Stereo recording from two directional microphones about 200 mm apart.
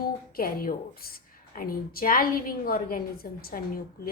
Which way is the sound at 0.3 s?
45° left (ahead or behind).